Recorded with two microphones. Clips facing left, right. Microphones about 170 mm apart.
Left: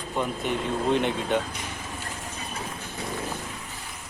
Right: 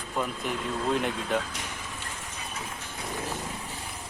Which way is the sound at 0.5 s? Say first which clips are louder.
Left 4 dB; 30° left (ahead or behind).